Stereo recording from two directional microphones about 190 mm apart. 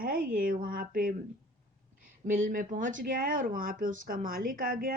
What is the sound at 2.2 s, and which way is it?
Speech, 45° right (ahead or behind).